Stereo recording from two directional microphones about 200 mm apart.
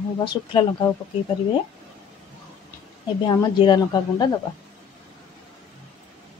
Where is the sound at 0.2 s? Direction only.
25° left (ahead or behind).